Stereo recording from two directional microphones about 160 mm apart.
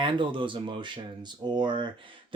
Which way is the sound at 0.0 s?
30° right (ahead or behind).